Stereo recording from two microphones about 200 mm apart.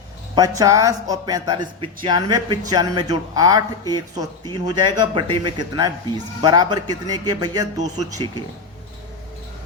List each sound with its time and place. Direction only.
0.3 s speech: 20° right (ahead or behind)